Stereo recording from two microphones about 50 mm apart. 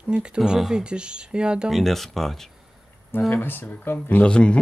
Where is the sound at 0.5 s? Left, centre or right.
Centre.